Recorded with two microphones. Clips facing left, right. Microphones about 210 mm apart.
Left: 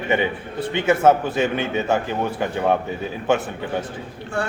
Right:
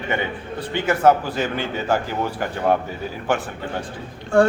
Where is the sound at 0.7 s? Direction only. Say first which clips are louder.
Left 1 dB; 25° left (ahead or behind).